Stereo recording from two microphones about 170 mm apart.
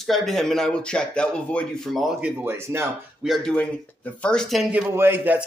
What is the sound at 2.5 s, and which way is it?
Speech, 15° right (ahead or behind).